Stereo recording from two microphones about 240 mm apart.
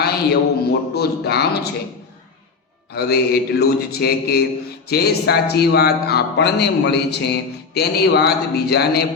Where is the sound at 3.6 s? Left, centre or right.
Left.